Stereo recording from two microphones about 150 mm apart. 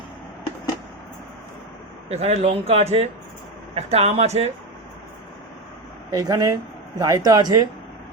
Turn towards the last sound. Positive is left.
turn(degrees=-25)  # may be behind; listen again after turning